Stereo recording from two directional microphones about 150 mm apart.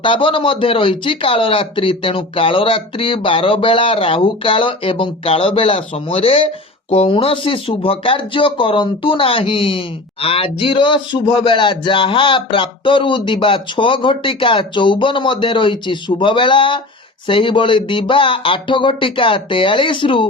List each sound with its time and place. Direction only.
0.0 s speech: 35° left (ahead or behind)